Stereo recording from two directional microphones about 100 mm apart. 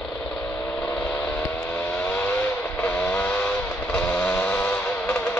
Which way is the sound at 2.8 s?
15° left (ahead or behind).